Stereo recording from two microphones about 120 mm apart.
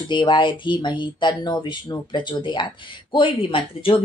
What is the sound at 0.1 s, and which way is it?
Speech, 40° left (ahead or behind).